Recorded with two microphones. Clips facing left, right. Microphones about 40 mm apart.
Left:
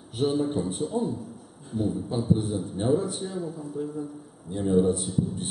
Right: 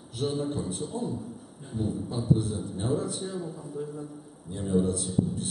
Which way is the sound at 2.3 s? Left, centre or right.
Left.